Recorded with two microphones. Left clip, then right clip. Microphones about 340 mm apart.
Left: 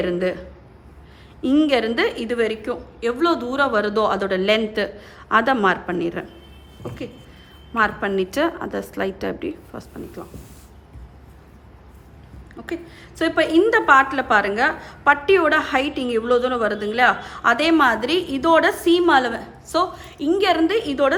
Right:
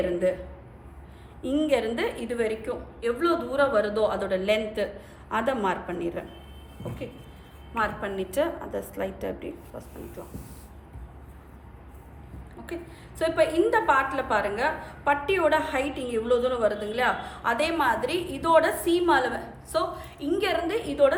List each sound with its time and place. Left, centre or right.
0.0 s a woman's voice: left
1.4 s a woman's voice: left
7.8 s a woman's voice: left
12.6 s a woman's voice: left